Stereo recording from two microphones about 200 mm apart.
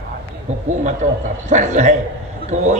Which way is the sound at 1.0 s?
40° right (ahead or behind).